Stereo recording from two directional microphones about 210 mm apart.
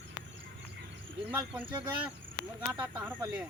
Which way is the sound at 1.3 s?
10° right (ahead or behind).